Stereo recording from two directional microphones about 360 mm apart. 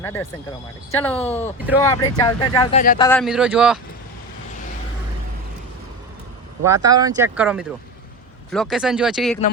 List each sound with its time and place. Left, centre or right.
0.0 s speech: centre
2.7 s a man's voice: left
3.0 s speech: centre
6.6 s speech: right
6.9 s speech: centre